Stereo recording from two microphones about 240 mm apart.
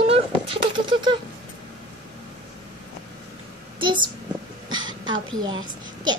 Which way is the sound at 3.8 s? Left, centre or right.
Centre.